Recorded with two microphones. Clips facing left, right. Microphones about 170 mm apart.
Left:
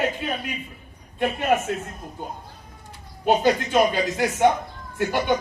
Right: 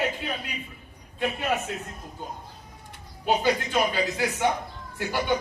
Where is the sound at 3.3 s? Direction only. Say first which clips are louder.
Left 4 dB; 55° left (ahead or behind).